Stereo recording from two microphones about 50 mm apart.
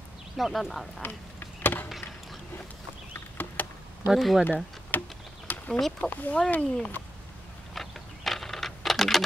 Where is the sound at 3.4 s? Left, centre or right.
Left.